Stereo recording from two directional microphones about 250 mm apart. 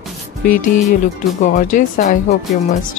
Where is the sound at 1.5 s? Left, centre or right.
Left.